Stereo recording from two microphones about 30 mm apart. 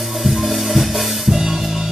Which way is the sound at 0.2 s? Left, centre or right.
Centre.